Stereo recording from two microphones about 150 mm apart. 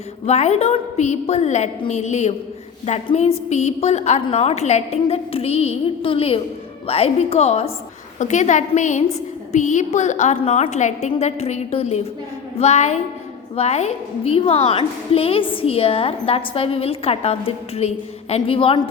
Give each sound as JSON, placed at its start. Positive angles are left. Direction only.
{"t": 0.3, "sound": "a woman's voice", "side_deg": 45}